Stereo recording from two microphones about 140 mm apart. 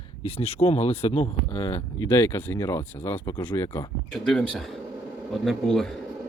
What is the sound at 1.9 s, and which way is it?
A man's voice, 20° left (ahead or behind).